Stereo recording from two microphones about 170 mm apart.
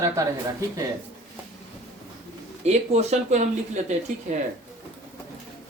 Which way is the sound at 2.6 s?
40° right (ahead or behind).